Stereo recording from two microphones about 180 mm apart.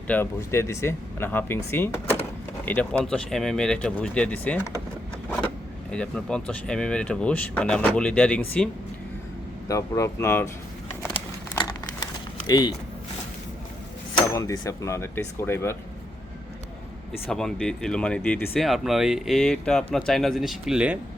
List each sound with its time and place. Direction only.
0.1 s speech: 15° left (ahead or behind)
5.9 s speech: 5° left (ahead or behind)
12.5 s speech: 20° left (ahead or behind)
14.2 s speech: 20° left (ahead or behind)
17.1 s speech: centre (ahead or behind)